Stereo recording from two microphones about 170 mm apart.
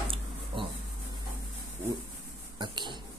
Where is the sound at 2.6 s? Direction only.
25° right (ahead or behind).